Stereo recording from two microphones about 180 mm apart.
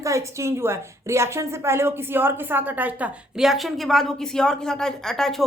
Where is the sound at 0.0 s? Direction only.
15° right (ahead or behind).